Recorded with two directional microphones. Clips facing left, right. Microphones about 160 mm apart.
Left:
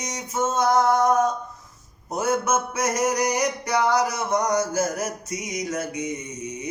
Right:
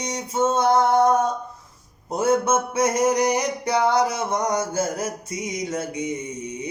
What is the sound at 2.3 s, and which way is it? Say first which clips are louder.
Mantra: right 3 dB; 30° right (ahead or behind).